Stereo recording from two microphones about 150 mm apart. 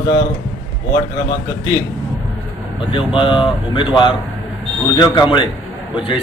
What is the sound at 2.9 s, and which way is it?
Speech, 35° left (ahead or behind).